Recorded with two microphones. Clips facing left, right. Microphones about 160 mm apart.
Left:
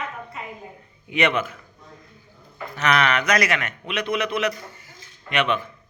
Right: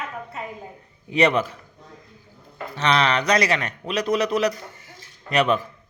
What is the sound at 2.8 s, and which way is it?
A man's voice, 30° right (ahead or behind).